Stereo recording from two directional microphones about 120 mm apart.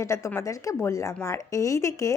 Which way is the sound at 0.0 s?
25° left (ahead or behind).